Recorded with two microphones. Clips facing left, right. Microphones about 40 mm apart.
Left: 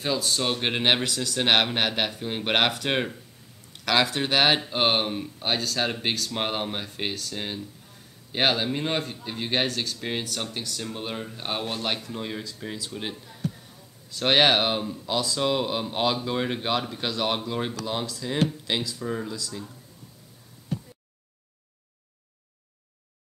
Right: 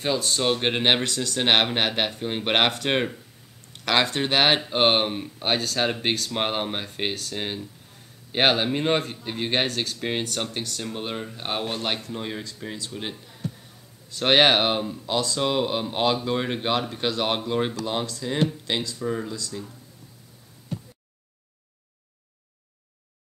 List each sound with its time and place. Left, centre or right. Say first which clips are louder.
0.0 s speech: right 2 dB; centre